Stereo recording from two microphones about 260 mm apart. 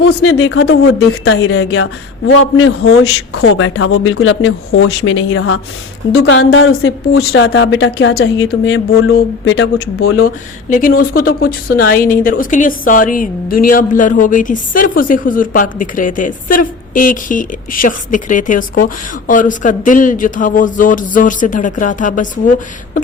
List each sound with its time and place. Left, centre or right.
0.0 s a woman's voice: left
10.2 s speech: left